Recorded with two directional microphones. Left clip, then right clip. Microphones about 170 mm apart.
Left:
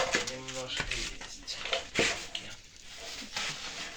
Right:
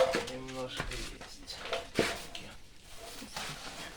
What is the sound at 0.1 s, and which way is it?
Dishes, 25° right (ahead or behind).